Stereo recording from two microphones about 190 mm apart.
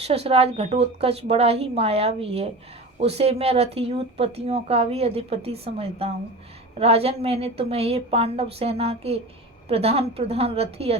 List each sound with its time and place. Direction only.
0.0 s speech: 30° right (ahead or behind)